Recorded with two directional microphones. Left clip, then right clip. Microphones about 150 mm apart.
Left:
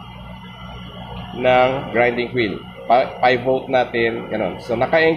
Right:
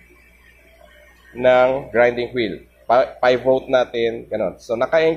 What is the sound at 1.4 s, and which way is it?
Speech, 45° right (ahead or behind).